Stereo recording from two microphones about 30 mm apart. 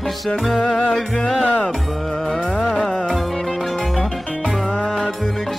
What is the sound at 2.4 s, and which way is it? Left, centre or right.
Music, left.